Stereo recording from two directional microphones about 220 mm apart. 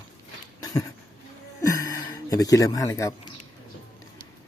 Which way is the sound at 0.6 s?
15° left (ahead or behind).